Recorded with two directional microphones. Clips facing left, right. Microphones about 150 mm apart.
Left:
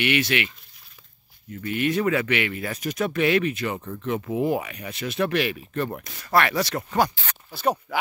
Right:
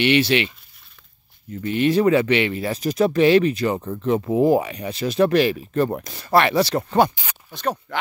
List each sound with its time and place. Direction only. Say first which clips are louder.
0.0 s speech: right 6 dB; 30° right (ahead or behind)
1.5 s speech: right 5 dB; 30° right (ahead or behind)
7.5 s speech: left 1 dB; 10° left (ahead or behind)